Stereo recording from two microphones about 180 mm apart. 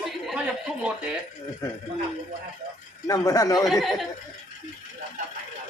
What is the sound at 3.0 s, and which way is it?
Speech, 20° left (ahead or behind).